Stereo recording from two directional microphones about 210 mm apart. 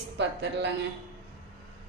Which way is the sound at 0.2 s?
55° right (ahead or behind).